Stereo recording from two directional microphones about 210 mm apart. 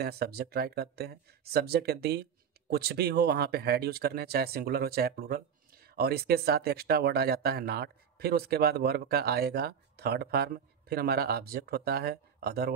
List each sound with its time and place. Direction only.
0.0 s speech: 50° right (ahead or behind)